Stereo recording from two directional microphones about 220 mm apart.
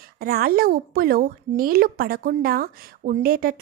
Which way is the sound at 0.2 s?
45° right (ahead or behind).